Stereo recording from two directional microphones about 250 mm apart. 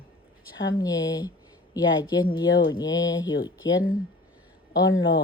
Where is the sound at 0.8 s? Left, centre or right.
Centre.